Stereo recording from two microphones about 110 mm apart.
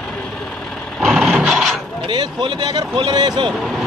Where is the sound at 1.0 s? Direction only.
Centre (ahead or behind).